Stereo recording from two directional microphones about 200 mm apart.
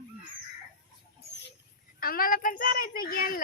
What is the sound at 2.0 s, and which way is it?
A child's voice, 45° left (ahead or behind).